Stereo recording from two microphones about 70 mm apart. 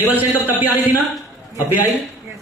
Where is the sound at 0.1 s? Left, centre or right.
Right.